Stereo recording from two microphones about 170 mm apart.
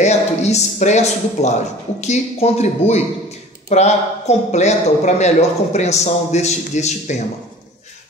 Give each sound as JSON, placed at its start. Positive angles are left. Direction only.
{"t": 0.0, "sound": "speech", "side_deg": 40}